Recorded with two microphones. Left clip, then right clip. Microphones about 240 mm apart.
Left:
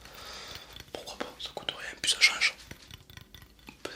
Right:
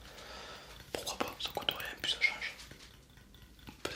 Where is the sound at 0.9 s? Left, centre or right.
Centre.